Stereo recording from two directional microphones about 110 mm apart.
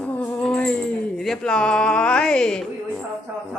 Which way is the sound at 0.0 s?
10° left (ahead or behind).